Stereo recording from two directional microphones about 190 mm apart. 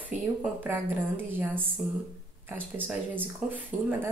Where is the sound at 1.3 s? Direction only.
10° right (ahead or behind).